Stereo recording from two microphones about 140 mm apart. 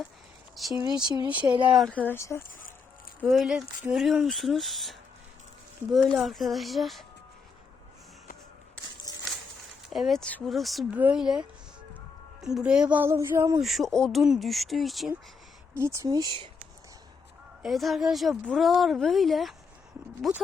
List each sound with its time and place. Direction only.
0.6 s speech: centre (ahead or behind)
1.5 s speech: 35° right (ahead or behind)
2.0 s speech: 15° left (ahead or behind)
3.2 s a woman's voice: centre (ahead or behind)
9.1 s a sound: 30° left (ahead or behind)
9.9 s a woman's voice: centre (ahead or behind); by 13.6 s 20° right (ahead or behind)
13.6 s a woman's voice: centre (ahead or behind)
15.7 s speech: 20° right (ahead or behind)
17.6 s a woman's voice: centre (ahead or behind)